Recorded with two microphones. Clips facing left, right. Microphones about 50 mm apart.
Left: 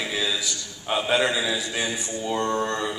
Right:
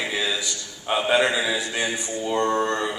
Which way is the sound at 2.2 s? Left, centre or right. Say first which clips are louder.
Right 3 dB; centre.